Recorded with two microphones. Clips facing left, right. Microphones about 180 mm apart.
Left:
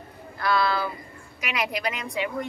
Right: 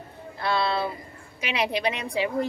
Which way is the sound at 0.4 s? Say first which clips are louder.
Left 1 dB; 25° right (ahead or behind).